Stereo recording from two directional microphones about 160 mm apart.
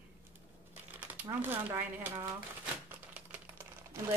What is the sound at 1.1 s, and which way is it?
Speech, 10° right (ahead or behind).